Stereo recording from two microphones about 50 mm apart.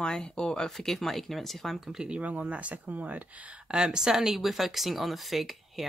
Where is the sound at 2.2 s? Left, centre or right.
Right.